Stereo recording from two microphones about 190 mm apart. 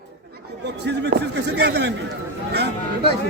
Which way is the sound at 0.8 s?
60° right (ahead or behind).